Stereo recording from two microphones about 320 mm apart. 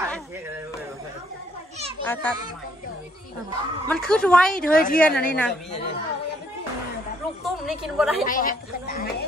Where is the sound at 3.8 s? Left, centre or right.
Centre.